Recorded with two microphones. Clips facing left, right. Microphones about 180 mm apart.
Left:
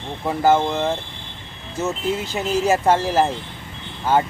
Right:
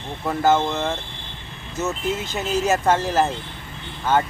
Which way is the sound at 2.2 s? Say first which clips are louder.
Left 2 dB; 10° left (ahead or behind).